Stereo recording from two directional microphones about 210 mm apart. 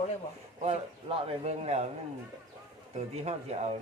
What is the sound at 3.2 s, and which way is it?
Speech, 30° right (ahead or behind).